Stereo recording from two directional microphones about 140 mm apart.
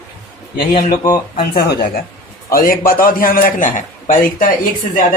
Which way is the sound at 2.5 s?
90° left.